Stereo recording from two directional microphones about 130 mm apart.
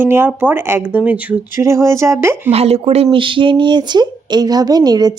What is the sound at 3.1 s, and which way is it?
A woman's voice, 40° right (ahead or behind).